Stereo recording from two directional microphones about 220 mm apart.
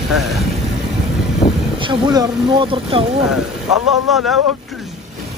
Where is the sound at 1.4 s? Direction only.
25° left (ahead or behind).